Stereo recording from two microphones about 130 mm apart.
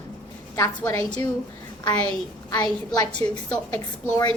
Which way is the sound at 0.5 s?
20° left (ahead or behind).